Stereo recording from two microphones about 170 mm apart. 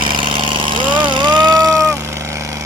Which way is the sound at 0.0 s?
30° right (ahead or behind).